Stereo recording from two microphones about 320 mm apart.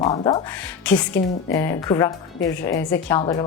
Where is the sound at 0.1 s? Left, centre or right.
Centre.